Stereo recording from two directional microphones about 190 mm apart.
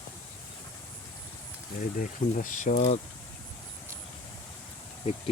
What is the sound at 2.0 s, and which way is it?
Speech, 45° left (ahead or behind).